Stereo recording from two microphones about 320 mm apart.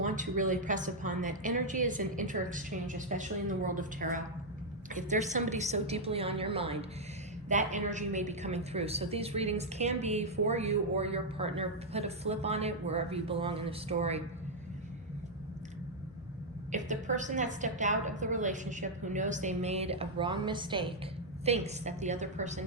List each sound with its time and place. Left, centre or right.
0.0 s a woman's voice: right
4.9 s a woman's voice: right
16.7 s a woman's voice: right